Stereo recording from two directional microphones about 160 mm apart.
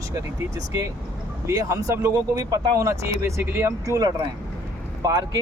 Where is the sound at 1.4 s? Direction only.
20° right (ahead or behind).